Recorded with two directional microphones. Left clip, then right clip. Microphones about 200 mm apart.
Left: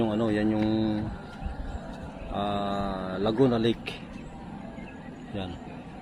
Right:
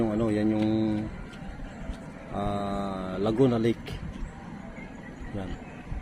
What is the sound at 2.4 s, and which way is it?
Speech, 10° right (ahead or behind).